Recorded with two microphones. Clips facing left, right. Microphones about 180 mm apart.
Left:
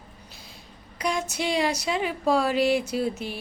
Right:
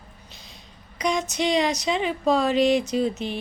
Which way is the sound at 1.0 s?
10° left (ahead or behind).